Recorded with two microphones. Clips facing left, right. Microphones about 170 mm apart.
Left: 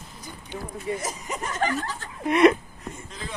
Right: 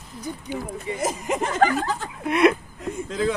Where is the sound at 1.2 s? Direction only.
90° right.